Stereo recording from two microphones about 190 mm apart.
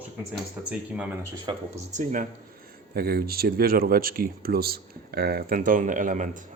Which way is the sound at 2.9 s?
55° right (ahead or behind).